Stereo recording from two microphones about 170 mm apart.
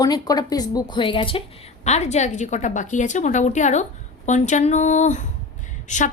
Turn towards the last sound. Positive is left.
turn(degrees=45)  # may be behind; listen again after turning